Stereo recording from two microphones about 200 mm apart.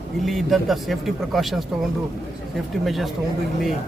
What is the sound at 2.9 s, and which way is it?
Speech, centre (ahead or behind).